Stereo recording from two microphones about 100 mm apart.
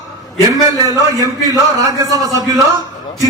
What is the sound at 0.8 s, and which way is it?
A man's voice, 35° right (ahead or behind).